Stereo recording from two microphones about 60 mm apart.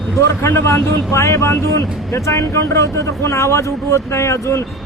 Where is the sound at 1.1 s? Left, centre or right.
Left.